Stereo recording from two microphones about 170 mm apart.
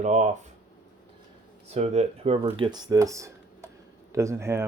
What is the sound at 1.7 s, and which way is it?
Speech, 40° right (ahead or behind).